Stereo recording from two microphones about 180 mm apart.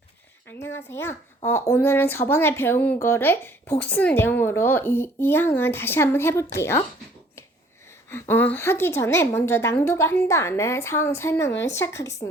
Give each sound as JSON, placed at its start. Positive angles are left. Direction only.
{"t": 0.4, "sound": "speech", "side_deg": 15}
{"t": 8.1, "sound": "speech", "side_deg": 10}